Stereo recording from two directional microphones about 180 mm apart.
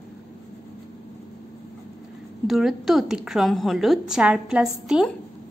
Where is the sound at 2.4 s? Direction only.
Centre (ahead or behind).